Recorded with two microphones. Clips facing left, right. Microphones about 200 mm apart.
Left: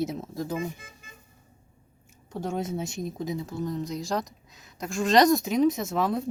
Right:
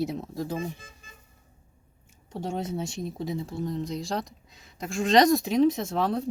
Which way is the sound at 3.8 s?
Centre (ahead or behind).